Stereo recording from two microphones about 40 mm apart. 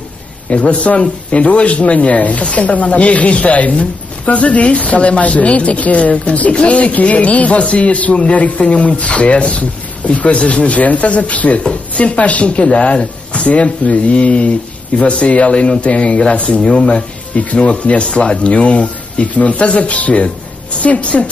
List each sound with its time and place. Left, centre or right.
0.5 s speech: left